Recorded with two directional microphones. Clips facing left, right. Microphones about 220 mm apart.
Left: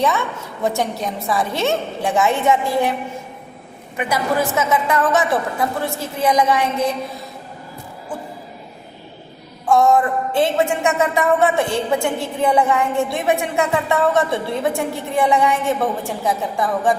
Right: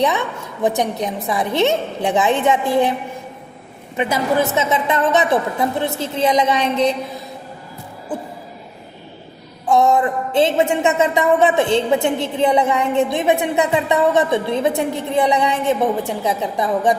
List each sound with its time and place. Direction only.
0.6 s a woman's voice: 20° right (ahead or behind)
3.9 s a woman's voice: 25° right (ahead or behind)
9.6 s a woman's voice: 20° right (ahead or behind)